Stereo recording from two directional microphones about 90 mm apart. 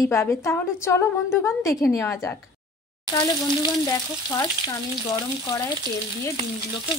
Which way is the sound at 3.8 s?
40° left (ahead or behind).